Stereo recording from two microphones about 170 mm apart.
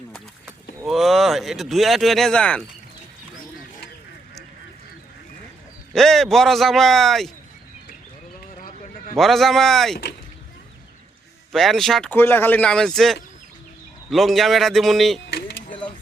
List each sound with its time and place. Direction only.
0.9 s speech: centre (ahead or behind)
5.9 s speech: centre (ahead or behind)
8.6 s a sound: 55° left (ahead or behind)
9.1 s speech: centre (ahead or behind)
11.5 s speech: centre (ahead or behind)
15.3 s vehicle: 90° left